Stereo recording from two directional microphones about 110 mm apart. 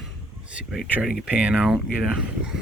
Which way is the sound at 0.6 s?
10° right (ahead or behind).